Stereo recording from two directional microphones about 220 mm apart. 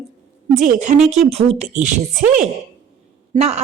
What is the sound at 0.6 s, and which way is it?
Speech, 35° right (ahead or behind).